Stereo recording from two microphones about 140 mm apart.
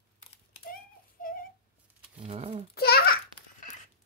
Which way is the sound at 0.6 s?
85° left.